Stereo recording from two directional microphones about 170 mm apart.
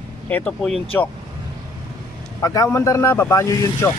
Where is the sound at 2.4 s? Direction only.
20° left (ahead or behind).